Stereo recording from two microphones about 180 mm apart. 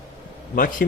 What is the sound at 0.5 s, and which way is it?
Speech, 50° left (ahead or behind).